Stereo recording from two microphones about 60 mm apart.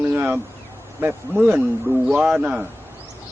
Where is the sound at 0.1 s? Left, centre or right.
Right.